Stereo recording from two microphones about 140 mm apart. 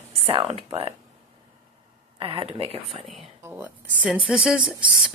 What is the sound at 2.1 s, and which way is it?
Speech, 40° right (ahead or behind).